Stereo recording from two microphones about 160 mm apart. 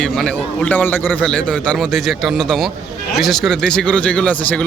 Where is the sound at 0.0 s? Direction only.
5° left (ahead or behind).